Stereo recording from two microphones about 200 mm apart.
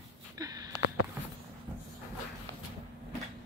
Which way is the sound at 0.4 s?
20° right (ahead or behind).